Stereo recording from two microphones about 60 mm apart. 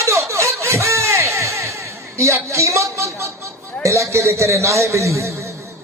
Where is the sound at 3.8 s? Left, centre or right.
Right.